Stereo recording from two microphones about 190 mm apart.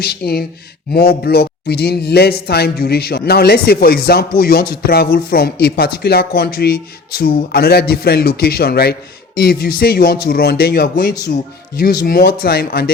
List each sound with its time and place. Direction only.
0.0 s speech: 55° left (ahead or behind)